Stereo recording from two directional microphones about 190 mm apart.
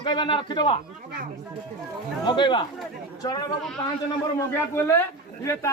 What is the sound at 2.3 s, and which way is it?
Speech, 25° left (ahead or behind).